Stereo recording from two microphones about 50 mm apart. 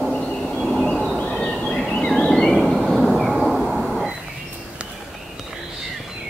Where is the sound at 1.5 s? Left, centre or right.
Centre.